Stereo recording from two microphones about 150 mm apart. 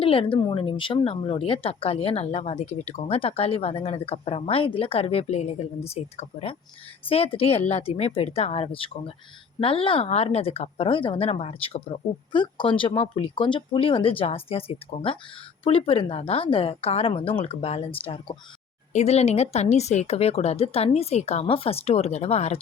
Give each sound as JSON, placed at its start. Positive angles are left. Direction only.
{"t": 0.0, "sound": "speech", "side_deg": 40}